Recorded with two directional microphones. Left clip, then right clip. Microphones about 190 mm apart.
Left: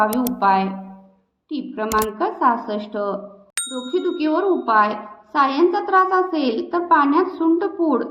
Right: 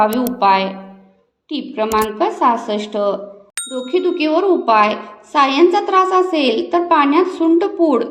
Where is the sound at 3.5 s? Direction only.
Centre (ahead or behind).